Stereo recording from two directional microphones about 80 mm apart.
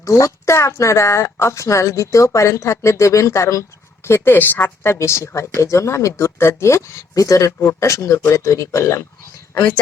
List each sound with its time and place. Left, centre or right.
0.0 s speech: left
4.9 s speech: left